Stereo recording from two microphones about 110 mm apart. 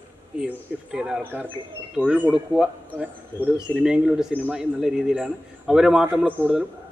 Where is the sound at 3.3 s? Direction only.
20° left (ahead or behind).